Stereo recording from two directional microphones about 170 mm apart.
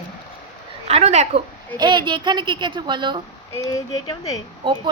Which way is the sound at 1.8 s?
25° right (ahead or behind).